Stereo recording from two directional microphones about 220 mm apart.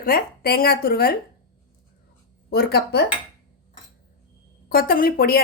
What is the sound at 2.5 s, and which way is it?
Speech, 45° left (ahead or behind).